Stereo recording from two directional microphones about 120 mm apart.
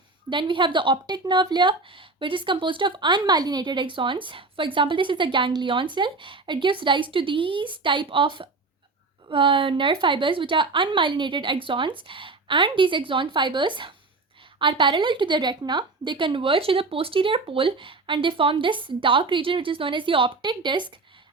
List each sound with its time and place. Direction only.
0.3 s speech: 45° right (ahead or behind)